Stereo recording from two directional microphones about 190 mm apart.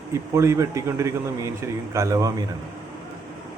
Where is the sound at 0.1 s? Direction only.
15° right (ahead or behind).